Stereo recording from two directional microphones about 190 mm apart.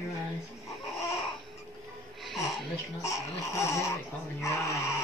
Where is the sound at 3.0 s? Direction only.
15° left (ahead or behind).